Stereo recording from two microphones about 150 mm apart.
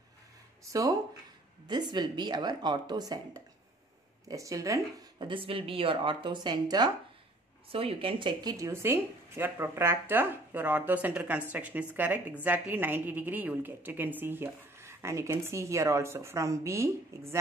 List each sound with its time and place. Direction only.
1.7 s speech: 30° right (ahead or behind)
5.2 s a woman's voice: 35° right (ahead or behind)
7.7 s a woman's voice: 40° right (ahead or behind); by 17.4 s 20° right (ahead or behind)